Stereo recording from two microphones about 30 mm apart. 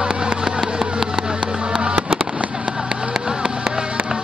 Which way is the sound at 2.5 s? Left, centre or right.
Right.